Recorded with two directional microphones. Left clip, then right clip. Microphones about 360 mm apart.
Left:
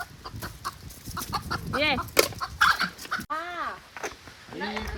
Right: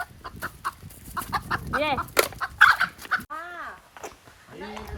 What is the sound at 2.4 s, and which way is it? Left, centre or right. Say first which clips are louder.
Chicken: right 5 dB; right.